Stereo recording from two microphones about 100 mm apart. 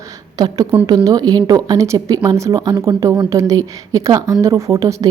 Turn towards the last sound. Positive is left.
turn(degrees=-30)  # may be behind; listen again after turning